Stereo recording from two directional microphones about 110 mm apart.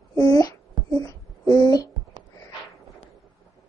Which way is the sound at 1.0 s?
35° left (ahead or behind).